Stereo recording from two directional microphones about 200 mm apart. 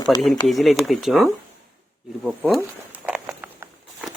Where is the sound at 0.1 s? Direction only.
20° left (ahead or behind).